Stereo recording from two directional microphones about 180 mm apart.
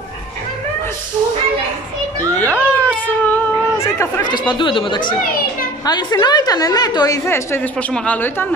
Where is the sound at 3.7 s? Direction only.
15° left (ahead or behind).